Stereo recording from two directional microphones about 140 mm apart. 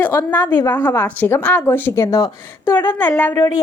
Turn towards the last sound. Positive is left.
turn(degrees=15)  # may be behind; listen again after turning